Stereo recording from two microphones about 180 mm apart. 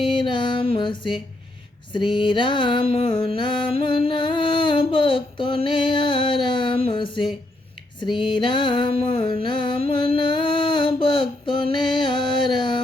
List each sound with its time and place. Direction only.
0.0 s music: 25° left (ahead or behind)